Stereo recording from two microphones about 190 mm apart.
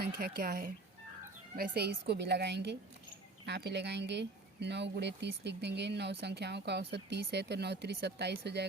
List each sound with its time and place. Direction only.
0.0 s speech: 55° right (ahead or behind)